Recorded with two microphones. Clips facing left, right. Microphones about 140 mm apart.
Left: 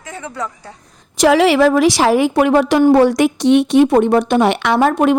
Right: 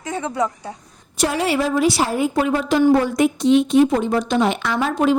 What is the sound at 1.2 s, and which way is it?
A woman's voice, 90° left.